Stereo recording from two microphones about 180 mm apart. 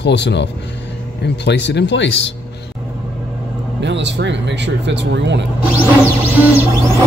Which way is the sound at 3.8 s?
80° right.